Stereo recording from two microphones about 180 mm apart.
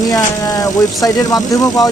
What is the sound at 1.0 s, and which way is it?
Speech, 20° left (ahead or behind).